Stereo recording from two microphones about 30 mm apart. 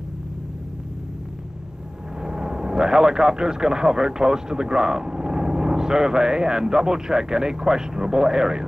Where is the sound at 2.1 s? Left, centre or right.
Right.